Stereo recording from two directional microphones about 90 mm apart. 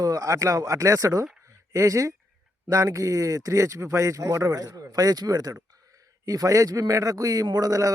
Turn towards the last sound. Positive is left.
turn(degrees=-40)  # may be behind; listen again after turning